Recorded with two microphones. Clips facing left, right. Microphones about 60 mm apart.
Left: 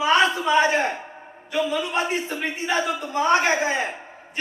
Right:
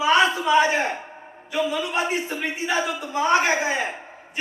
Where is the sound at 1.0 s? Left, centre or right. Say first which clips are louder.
Even; centre.